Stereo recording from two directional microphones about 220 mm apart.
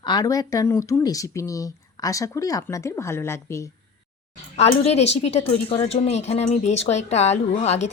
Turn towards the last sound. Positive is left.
turn(degrees=30)  # may be behind; listen again after turning